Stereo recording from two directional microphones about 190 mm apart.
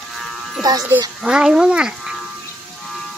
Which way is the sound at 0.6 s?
20° right (ahead or behind).